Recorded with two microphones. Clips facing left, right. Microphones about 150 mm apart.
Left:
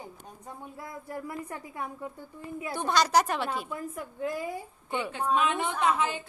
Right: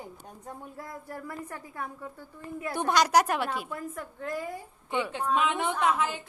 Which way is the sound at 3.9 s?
10° left (ahead or behind).